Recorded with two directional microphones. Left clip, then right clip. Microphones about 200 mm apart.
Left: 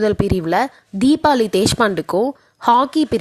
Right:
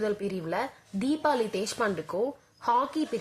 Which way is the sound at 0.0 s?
35° left (ahead or behind).